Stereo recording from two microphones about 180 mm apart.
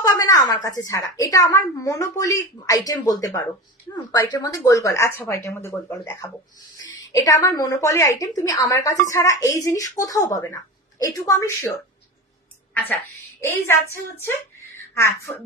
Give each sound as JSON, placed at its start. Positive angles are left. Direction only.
{"t": 0.0, "sound": "a woman's voice", "side_deg": 20}
{"t": 6.8, "sound": "a woman's voice", "side_deg": 20}
{"t": 12.7, "sound": "a woman's voice", "side_deg": 10}